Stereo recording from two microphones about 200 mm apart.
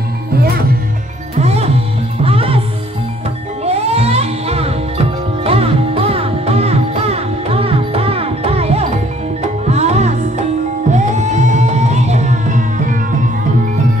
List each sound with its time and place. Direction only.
1.4 s music: 30° right (ahead or behind)
3.6 s music: 30° right (ahead or behind)